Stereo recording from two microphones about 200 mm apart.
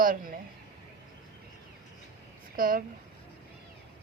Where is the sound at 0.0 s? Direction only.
45° right (ahead or behind).